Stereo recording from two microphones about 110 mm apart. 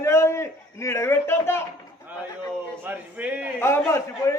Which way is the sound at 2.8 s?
15° right (ahead or behind).